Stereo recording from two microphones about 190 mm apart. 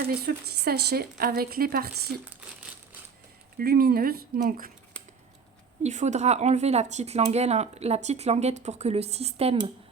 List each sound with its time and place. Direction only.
0.1 s a woman's voice: 55° right (ahead or behind)
3.6 s speech: 50° right (ahead or behind)
5.8 s speech: 40° right (ahead or behind)